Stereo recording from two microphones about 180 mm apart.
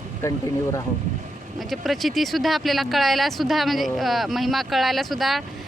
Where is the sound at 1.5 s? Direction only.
Centre (ahead or behind).